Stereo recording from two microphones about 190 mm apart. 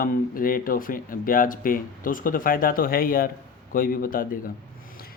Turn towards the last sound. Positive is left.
turn(degrees=45)  # may be behind; listen again after turning